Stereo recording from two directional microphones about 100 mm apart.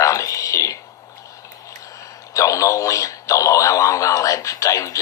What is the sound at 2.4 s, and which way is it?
Speech, 35° left (ahead or behind).